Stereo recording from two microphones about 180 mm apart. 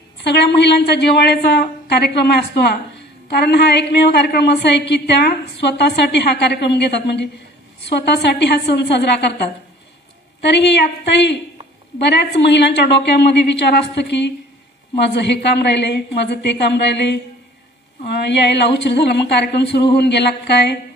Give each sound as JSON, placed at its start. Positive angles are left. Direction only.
{"t": 0.2, "sound": "a woman's voice", "side_deg": 70}